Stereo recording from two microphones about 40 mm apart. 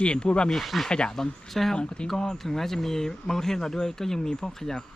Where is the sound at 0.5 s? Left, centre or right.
Centre.